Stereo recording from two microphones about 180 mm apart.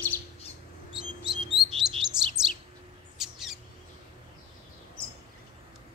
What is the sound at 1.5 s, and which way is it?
Bird, 5° right (ahead or behind).